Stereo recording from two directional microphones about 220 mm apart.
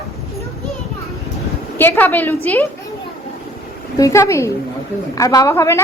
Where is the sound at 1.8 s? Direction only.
10° left (ahead or behind).